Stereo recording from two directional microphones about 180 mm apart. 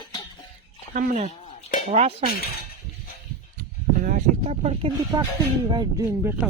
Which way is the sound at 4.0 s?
50° right (ahead or behind).